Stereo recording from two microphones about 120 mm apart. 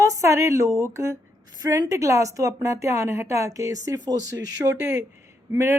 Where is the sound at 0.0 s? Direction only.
25° right (ahead or behind).